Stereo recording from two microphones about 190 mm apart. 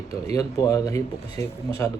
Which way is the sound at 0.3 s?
20° left (ahead or behind).